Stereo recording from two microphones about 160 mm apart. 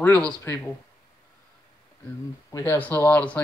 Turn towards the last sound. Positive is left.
turn(degrees=10)  # may be behind; listen again after turning